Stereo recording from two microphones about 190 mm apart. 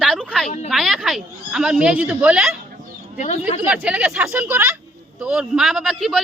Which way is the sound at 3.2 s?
35° left (ahead or behind).